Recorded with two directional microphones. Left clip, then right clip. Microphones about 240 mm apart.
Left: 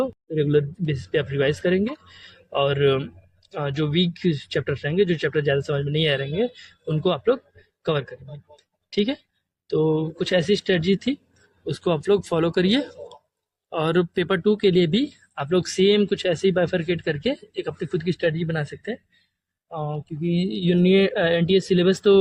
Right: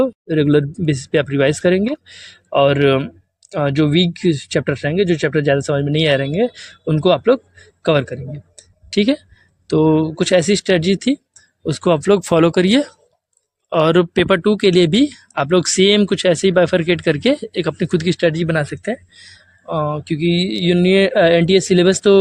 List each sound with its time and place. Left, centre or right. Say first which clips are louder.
0.0 s speech: right 8 dB; right
8.5 s a sound: right 6 dB; right
9.6 s speech: right 7 dB; right